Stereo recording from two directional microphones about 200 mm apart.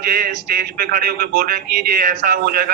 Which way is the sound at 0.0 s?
45° right (ahead or behind).